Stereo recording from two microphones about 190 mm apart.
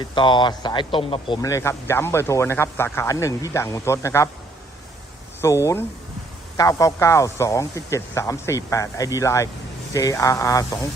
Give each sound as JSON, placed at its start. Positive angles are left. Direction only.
{"t": 0.0, "sound": "a man's voice", "side_deg": 25}
{"t": 5.4, "sound": "a man's voice", "side_deg": 15}